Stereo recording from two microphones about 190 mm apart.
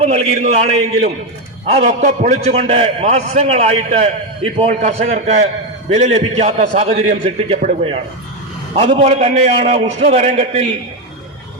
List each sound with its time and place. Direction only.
0.0 s a man's voice: 35° right (ahead or behind)